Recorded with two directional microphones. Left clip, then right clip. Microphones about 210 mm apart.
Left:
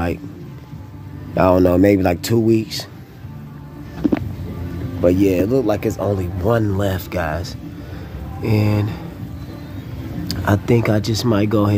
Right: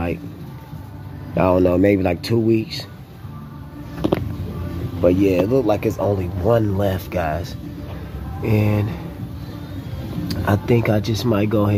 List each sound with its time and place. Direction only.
1.3 s speech: 20° left (ahead or behind)
5.0 s speech: 20° left (ahead or behind)
10.2 s speech: 20° left (ahead or behind)